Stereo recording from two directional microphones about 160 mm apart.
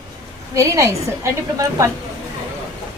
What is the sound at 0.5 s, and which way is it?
A woman's voice, 20° right (ahead or behind).